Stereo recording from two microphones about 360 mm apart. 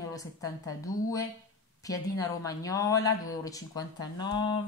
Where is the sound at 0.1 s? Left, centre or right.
Centre.